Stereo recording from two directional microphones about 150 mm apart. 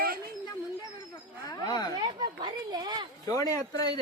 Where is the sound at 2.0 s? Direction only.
30° right (ahead or behind).